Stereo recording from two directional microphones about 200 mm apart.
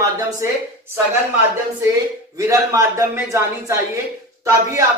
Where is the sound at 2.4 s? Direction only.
15° right (ahead or behind).